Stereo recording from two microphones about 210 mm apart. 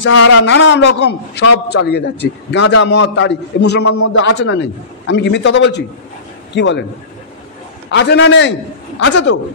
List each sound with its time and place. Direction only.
0.0 s a man's voice: 60° left (ahead or behind)
7.9 s a man's voice: 55° left (ahead or behind)